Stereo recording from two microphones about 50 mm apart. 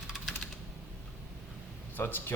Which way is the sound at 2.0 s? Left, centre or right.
Left.